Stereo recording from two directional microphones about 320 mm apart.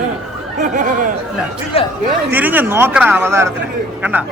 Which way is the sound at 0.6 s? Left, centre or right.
Right.